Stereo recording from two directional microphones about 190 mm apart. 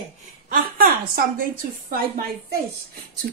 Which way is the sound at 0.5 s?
50° right (ahead or behind).